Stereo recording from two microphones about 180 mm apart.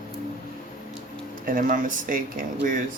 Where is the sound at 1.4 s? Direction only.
50° right (ahead or behind).